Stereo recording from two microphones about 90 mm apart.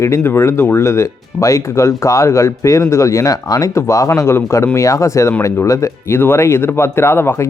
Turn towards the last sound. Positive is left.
turn(degrees=30)  # may be behind; listen again after turning